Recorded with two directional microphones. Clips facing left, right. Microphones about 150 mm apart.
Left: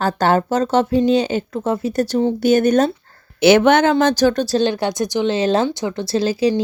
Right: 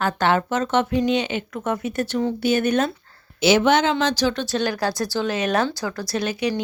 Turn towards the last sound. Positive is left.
turn(degrees=30)  # may be behind; listen again after turning